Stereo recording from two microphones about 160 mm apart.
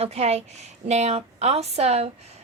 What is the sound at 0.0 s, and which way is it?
A woman's voice, 40° right (ahead or behind).